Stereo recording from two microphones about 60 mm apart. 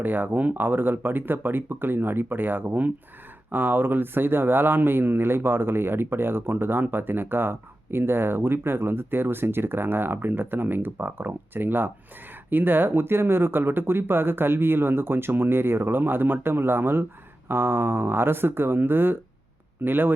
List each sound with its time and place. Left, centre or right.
0.0 s speech: right